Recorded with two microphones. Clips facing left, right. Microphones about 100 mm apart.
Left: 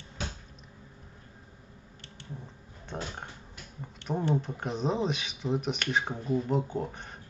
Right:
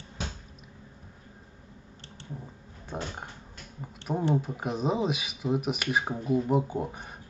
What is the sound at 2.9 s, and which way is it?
Speech, centre (ahead or behind).